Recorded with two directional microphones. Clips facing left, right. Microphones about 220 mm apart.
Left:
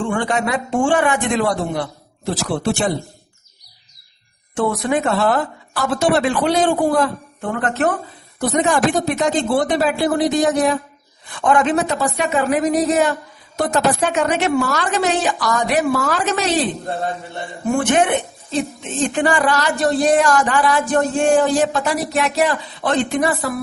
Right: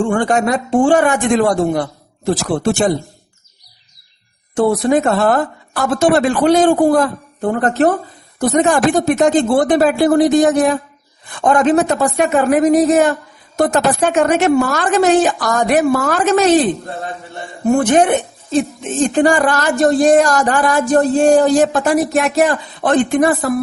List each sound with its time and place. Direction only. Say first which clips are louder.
0.0 s a woman's voice: right 5 dB; 45° right (ahead or behind)
4.5 s a woman's voice: right 6 dB; 40° right (ahead or behind)
8.4 s a woman's voice: right 4 dB; 45° right (ahead or behind)
17.7 s a woman's voice: right 5 dB; 40° right (ahead or behind)